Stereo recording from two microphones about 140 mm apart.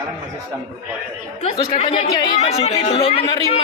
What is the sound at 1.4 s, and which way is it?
Speech, 45° left (ahead or behind).